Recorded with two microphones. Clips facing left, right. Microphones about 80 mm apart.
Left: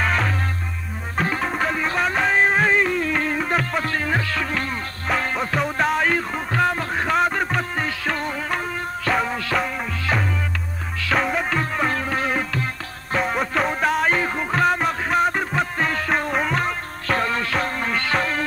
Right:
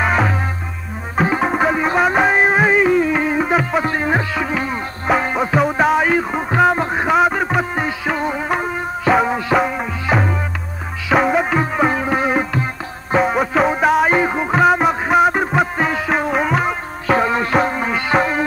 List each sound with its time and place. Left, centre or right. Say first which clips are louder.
0.0 s music: right 5 dB; centre
7.1 s music: right 5 dB; centre
13.1 s music: right 6 dB; centre
14.1 s music: right 6 dB; centre